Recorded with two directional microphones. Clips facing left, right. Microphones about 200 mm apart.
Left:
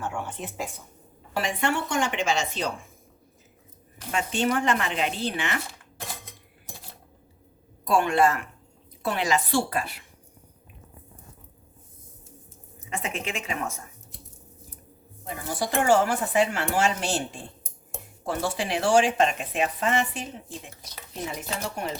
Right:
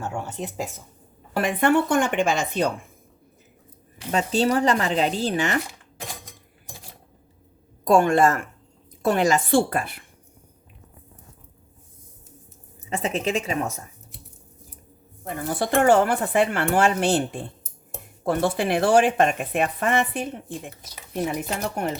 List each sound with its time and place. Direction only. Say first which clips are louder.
0.0 s speech: right 2 dB; 40° right (ahead or behind)
1.4 s speech: right 7 dB; 55° right (ahead or behind)
4.1 s speech: right 4 dB; 35° right (ahead or behind)
7.9 s speech: right 4 dB; 45° right (ahead or behind)
12.9 s speech: right 7 dB; 35° right (ahead or behind)
15.2 s speech: right 4 dB; 55° right (ahead or behind)